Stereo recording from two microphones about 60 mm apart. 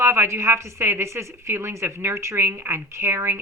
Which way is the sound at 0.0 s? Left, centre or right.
Right.